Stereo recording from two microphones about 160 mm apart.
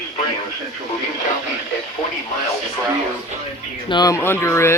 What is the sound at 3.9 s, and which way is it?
Speech, 25° left (ahead or behind).